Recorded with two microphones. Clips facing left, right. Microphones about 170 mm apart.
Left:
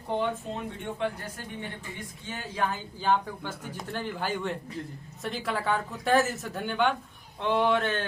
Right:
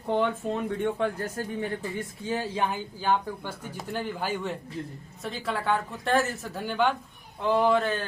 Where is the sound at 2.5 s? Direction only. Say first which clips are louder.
Left 3 dB; 25° right (ahead or behind).